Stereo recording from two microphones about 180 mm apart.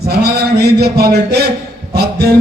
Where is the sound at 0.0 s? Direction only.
60° right (ahead or behind).